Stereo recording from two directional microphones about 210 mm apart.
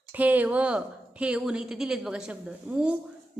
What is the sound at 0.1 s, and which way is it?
A woman's voice, 10° right (ahead or behind).